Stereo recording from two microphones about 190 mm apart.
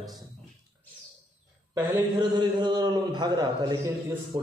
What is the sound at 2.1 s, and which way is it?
A man's voice, 20° right (ahead or behind).